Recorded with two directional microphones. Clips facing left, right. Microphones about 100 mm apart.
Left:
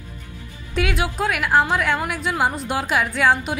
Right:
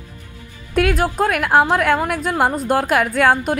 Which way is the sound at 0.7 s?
45° right (ahead or behind).